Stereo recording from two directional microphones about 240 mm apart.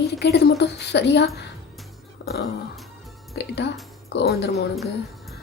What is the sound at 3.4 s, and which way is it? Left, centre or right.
Speech, left.